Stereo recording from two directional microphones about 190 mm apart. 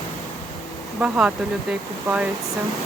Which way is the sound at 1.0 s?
5° right (ahead or behind).